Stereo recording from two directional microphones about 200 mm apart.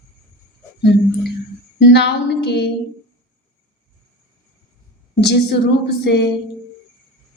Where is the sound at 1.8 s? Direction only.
60° left (ahead or behind).